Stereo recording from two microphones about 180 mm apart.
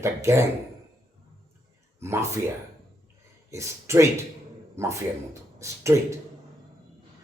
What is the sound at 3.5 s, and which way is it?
Speech, 15° right (ahead or behind).